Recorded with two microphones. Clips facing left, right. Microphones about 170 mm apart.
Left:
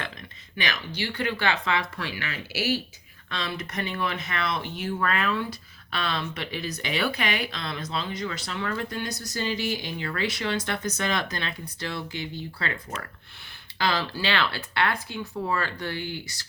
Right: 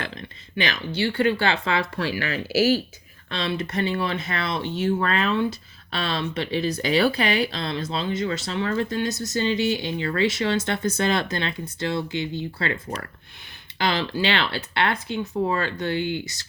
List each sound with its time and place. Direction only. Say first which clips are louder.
0.5 s speech: right 5 dB; 30° right (ahead or behind)
3.2 s speech: right 6 dB; 30° right (ahead or behind)